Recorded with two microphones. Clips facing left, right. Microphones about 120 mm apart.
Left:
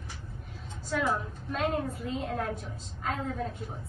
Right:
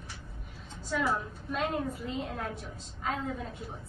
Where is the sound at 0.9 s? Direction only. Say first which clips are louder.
Left 1 dB; centre (ahead or behind).